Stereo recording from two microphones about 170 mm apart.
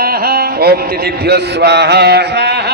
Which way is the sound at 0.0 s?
65° right (ahead or behind).